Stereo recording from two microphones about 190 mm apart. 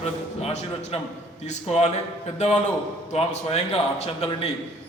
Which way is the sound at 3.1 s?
35° left (ahead or behind).